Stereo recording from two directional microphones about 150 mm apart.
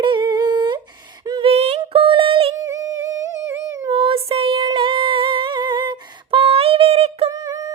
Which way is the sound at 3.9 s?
35° right (ahead or behind).